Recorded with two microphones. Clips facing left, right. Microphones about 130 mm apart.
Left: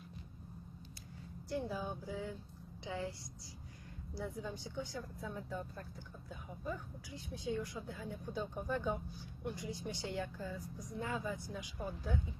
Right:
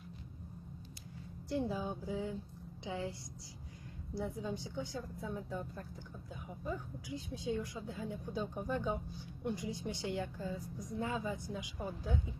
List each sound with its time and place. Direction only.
1.5 s a woman's voice: 20° right (ahead or behind)